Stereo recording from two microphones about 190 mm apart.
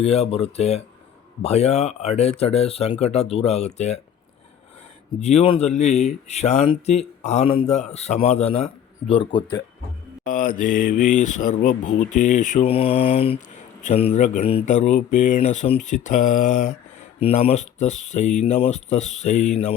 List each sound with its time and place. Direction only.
0.0 s speech: 35° left (ahead or behind)
5.2 s speech: 35° left (ahead or behind)
10.2 s speech: 45° left (ahead or behind)